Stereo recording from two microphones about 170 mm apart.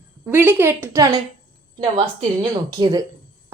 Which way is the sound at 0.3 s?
10° right (ahead or behind).